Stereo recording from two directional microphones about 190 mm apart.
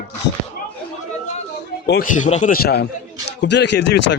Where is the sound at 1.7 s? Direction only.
50° left (ahead or behind).